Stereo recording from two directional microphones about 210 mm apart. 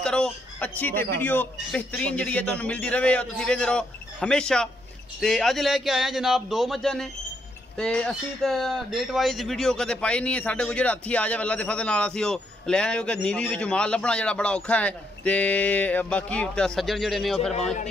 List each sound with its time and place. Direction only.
0.0 s speech: 5° left (ahead or behind)
17.4 s a man's voice: 30° left (ahead or behind)